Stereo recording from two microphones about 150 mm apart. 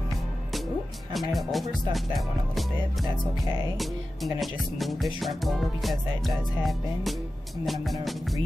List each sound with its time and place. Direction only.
1.1 s speech: centre (ahead or behind)